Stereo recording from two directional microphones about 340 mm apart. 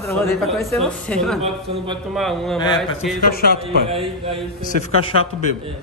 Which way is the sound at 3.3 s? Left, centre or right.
Left.